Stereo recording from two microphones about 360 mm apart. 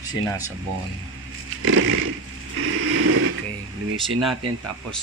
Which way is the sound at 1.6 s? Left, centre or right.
Right.